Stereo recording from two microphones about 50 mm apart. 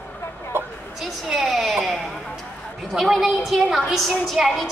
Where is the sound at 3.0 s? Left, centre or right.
Centre.